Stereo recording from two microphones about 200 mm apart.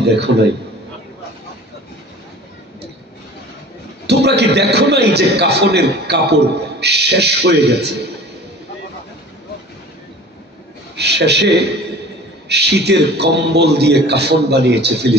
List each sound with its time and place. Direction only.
0.0 s a man's voice: 60° right (ahead or behind)
4.1 s a man's voice: 55° right (ahead or behind)
11.0 s a man's voice: 55° right (ahead or behind)